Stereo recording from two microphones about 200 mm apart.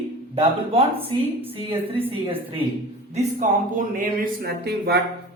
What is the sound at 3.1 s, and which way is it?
Speech, 40° right (ahead or behind).